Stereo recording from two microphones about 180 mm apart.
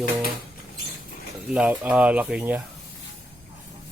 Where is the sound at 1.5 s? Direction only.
5° right (ahead or behind).